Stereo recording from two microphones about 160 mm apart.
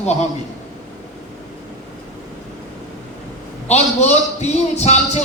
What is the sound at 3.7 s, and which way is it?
A man's voice, 45° left (ahead or behind).